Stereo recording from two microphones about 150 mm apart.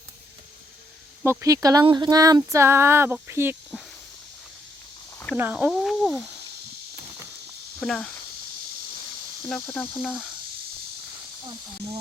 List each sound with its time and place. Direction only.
1.2 s speech: 20° right (ahead or behind)
5.3 s speech: 10° right (ahead or behind)
6.0 s a sound: 5° right (ahead or behind)
7.8 s speech: 5° left (ahead or behind)
9.6 s speech: 10° left (ahead or behind)